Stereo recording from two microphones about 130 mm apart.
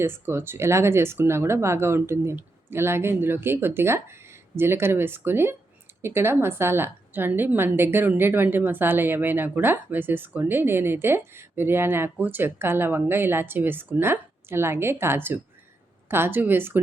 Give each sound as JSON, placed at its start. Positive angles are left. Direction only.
{"t": 0.0, "sound": "a woman's voice", "side_deg": -20}